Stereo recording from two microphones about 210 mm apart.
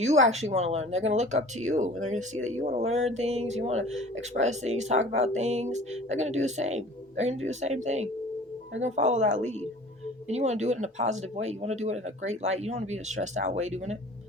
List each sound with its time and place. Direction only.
0.0 s speech: 35° right (ahead or behind)